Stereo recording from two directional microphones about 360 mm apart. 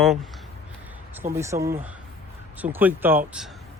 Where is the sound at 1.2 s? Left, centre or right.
Centre.